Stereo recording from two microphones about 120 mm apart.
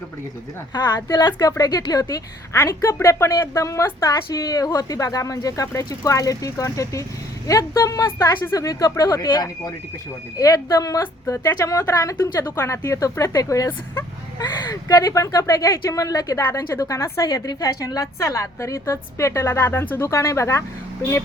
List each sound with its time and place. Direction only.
0.7 s speech: 35° left (ahead or behind)